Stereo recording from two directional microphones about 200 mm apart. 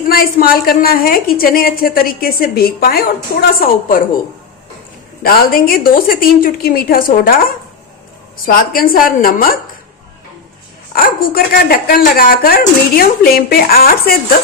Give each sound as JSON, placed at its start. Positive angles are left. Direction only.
{"t": 0.1, "sound": "speech", "side_deg": 50}
{"t": 5.2, "sound": "speech", "side_deg": 50}
{"t": 10.9, "sound": "speech", "side_deg": 50}